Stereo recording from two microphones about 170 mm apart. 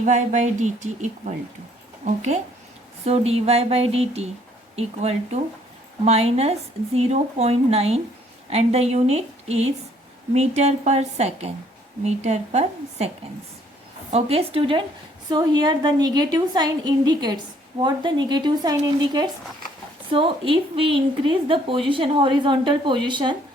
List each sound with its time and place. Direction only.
0.0 s speech: 45° right (ahead or behind)
3.0 s a woman's voice: 35° right (ahead or behind)
14.1 s a woman's voice: 35° right (ahead or behind)